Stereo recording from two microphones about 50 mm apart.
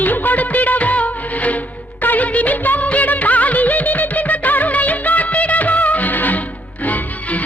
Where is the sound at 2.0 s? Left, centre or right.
Left.